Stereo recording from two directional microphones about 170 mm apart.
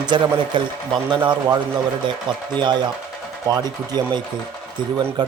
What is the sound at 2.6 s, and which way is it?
Speech, 25° right (ahead or behind).